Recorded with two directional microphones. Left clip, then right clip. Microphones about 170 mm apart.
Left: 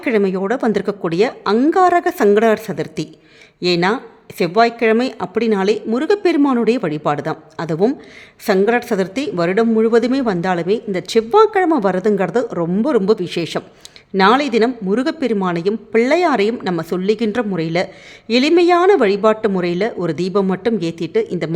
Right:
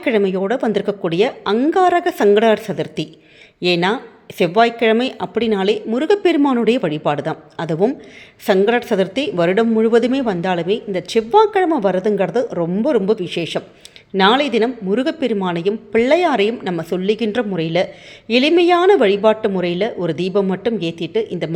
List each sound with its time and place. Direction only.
0.0 s a woman's voice: 15° left (ahead or behind)